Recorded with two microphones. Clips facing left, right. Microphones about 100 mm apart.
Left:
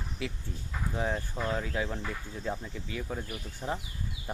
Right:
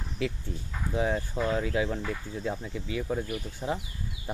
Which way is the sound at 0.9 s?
10° right (ahead or behind).